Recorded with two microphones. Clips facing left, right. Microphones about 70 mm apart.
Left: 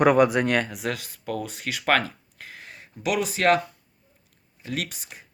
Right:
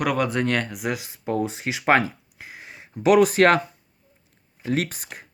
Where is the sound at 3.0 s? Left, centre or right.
Right.